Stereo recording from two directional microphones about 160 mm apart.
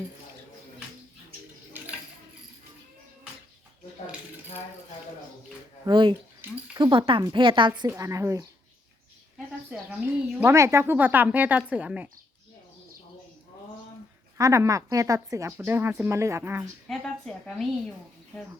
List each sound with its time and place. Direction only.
5.8 s speech: 30° right (ahead or behind)
7.9 s speech: 20° right (ahead or behind)
10.2 s speech: 10° right (ahead or behind)
14.3 s speech: 20° right (ahead or behind)
16.9 s a woman's voice: 5° left (ahead or behind)